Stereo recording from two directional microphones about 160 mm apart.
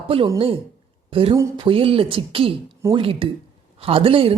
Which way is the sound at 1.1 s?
35° right (ahead or behind).